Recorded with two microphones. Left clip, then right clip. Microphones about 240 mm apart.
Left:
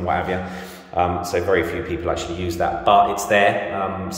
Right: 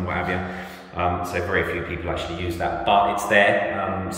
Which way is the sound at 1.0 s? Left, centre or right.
Left.